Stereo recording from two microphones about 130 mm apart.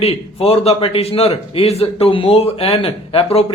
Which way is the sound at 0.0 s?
50° left (ahead or behind).